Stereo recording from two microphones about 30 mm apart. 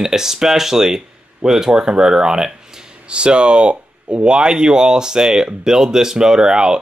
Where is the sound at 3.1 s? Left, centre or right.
Right.